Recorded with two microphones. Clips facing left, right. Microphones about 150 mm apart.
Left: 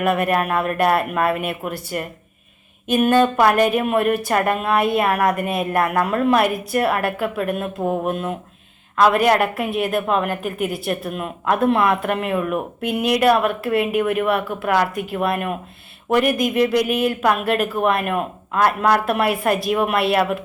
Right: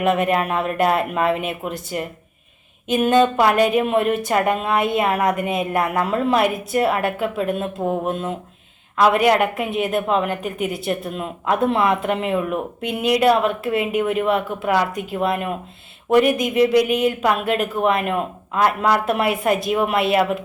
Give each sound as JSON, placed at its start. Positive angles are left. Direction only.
{"t": 0.0, "sound": "a woman's voice", "side_deg": -20}